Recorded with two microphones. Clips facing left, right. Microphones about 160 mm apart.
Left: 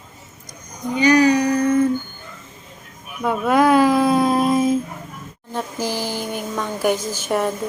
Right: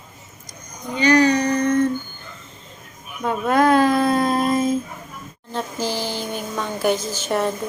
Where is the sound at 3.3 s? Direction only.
10° left (ahead or behind).